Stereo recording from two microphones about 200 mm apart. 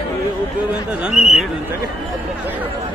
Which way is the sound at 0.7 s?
5° right (ahead or behind).